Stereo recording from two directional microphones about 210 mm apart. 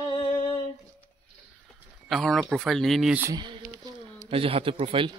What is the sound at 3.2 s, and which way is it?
Speech, 20° right (ahead or behind).